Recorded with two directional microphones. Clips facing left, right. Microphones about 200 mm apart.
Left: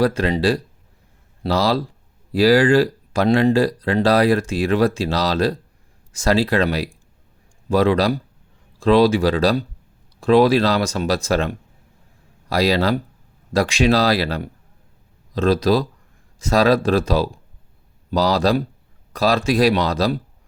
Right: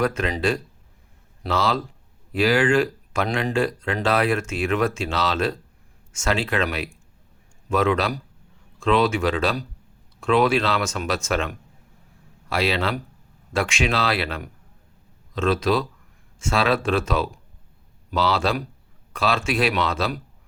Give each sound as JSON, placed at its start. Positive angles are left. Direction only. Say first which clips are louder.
{"t": 0.0, "sound": "speech", "louder": "left 5 dB", "side_deg": 35}